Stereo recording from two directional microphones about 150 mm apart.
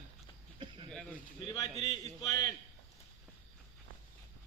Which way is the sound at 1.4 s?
25° left (ahead or behind).